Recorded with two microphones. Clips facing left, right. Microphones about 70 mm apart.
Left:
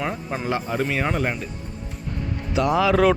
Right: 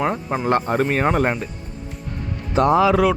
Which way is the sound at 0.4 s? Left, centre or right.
Right.